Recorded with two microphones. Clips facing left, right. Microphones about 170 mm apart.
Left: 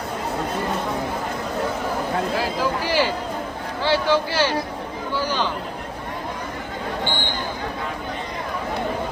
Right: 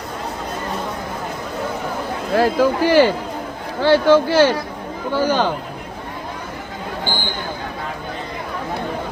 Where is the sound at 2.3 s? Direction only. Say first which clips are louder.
Right 7 dB; 55° right (ahead or behind).